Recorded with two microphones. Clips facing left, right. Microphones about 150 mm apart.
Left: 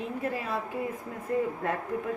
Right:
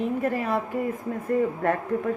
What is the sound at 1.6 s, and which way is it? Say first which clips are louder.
Speech: right 7 dB; 60° right (ahead or behind).